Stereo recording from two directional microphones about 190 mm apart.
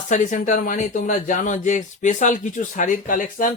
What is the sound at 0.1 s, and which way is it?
A man's voice, 40° left (ahead or behind).